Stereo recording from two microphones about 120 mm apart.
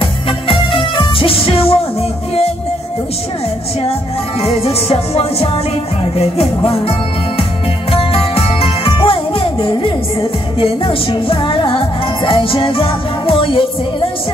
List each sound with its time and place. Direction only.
0.5 s music: 45° left (ahead or behind)
4.4 s music: 55° left (ahead or behind)
7.9 s jingle bell: 50° left (ahead or behind)
10.6 s music: 50° left (ahead or behind)